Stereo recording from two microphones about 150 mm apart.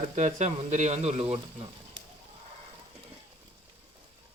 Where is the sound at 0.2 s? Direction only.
50° right (ahead or behind).